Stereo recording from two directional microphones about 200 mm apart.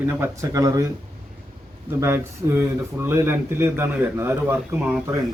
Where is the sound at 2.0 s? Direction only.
10° right (ahead or behind).